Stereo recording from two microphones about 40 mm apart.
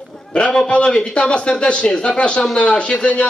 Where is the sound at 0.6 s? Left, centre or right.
Left.